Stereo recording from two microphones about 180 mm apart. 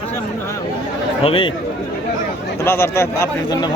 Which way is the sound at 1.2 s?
30° left (ahead or behind).